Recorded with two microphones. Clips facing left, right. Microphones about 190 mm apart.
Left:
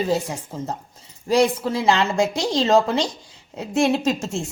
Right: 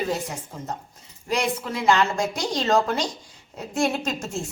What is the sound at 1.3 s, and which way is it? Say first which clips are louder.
Speech: left 7 dB; 30° left (ahead or behind).